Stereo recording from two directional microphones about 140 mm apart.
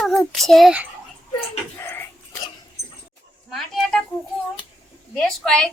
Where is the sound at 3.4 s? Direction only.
Centre (ahead or behind).